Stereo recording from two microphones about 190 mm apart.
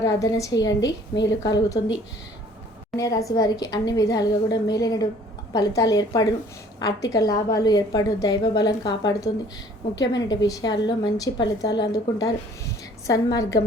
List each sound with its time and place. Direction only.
0.0 s a woman's voice: 20° left (ahead or behind)
3.0 s a woman's voice: 15° left (ahead or behind)